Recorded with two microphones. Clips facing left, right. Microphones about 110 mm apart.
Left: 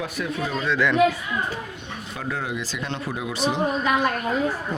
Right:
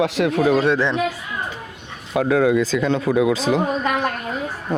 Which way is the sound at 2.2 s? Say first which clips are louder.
Right 13 dB; 90° right.